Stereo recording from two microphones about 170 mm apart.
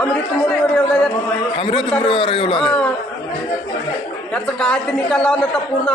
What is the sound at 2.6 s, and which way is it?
Speech, 5° left (ahead or behind).